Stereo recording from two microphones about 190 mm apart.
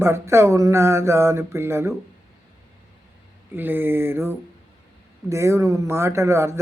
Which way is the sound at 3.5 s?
10° right (ahead or behind).